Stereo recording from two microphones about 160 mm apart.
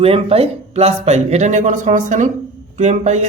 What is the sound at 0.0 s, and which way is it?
Speech, 35° right (ahead or behind).